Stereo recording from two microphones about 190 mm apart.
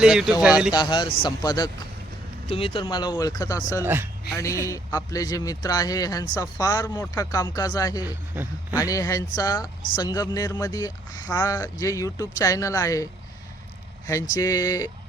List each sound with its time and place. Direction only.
0.0 s speech: 5° right (ahead or behind)
0.7 s a man's voice: 20° left (ahead or behind)
8.0 s speech: 10° right (ahead or behind)
8.8 s a man's voice: 20° left (ahead or behind)
14.1 s speech: 15° left (ahead or behind)